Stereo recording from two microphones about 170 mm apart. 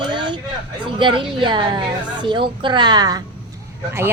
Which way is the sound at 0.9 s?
30° right (ahead or behind).